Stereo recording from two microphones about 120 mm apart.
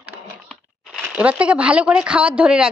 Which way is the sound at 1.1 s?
10° right (ahead or behind).